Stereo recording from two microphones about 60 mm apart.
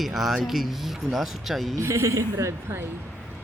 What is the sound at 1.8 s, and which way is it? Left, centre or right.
Speech, right.